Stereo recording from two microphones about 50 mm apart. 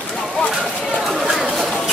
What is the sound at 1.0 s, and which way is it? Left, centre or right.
Chatter, centre.